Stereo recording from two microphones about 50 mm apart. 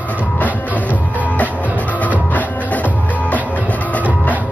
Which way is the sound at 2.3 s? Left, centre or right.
Left.